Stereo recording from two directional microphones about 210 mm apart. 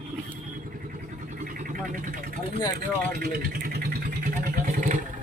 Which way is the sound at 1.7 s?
40° right (ahead or behind).